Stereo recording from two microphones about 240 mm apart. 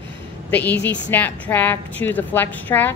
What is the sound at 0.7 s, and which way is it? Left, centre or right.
Speech, left.